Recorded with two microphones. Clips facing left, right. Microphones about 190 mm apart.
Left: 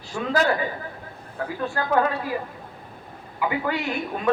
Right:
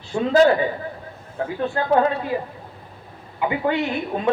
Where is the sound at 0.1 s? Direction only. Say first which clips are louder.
Right 7 dB; 35° right (ahead or behind).